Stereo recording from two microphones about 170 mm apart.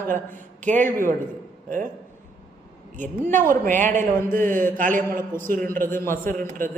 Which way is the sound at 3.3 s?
50° right (ahead or behind).